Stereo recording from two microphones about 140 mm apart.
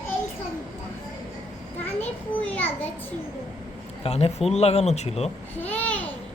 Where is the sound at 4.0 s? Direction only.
45° left (ahead or behind).